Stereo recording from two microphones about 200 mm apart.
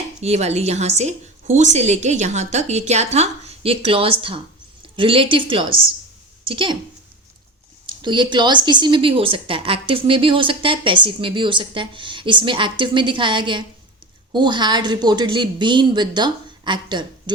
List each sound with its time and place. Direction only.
0.2 s a woman's voice: 35° right (ahead or behind)
7.9 s a woman's voice: 25° right (ahead or behind)